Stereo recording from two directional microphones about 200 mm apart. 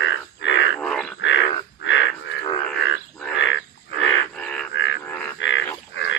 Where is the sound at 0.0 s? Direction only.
65° left (ahead or behind).